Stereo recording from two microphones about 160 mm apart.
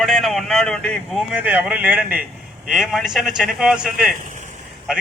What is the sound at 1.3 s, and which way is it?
Speech, 10° right (ahead or behind).